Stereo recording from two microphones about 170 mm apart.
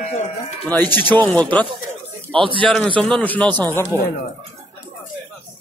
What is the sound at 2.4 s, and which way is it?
Speech, 30° right (ahead or behind).